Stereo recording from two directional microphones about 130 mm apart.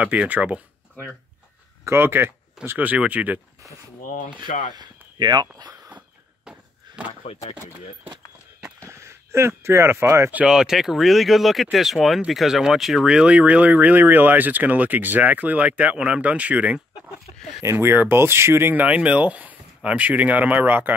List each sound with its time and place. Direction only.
0.0 s speech: 10° right (ahead or behind)
4.0 s speech: 90° left
4.7 s speech: 35° right (ahead or behind)
5.9 s cough: 10° right (ahead or behind)
7.2 s speech: 45° left (ahead or behind)
8.8 s speech: 20° right (ahead or behind)
10.4 s speech: 5° right (ahead or behind)